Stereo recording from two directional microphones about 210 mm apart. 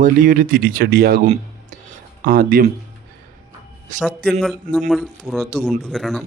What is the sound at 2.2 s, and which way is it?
Speech, 45° right (ahead or behind).